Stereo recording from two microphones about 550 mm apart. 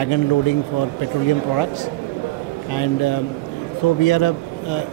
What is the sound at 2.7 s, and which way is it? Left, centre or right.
A man's voice, left.